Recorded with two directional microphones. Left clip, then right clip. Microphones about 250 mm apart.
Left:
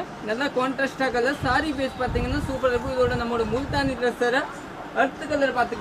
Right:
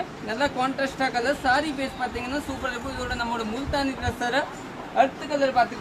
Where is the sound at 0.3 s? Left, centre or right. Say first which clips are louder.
Left 1 dB; centre.